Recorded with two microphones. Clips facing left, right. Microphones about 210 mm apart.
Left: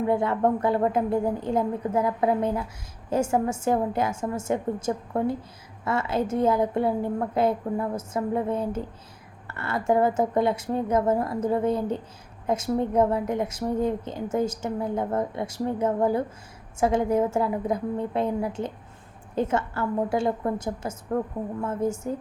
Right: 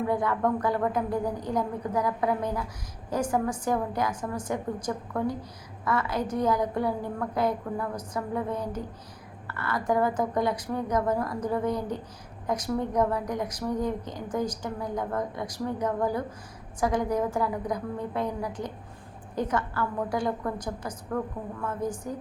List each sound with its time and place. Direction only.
0.1 s a woman's voice: 25° left (ahead or behind)